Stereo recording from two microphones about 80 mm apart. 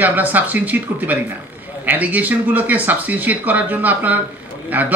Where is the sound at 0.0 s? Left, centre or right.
Right.